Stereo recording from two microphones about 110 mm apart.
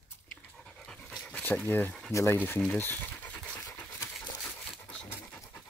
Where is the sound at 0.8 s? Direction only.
5° left (ahead or behind).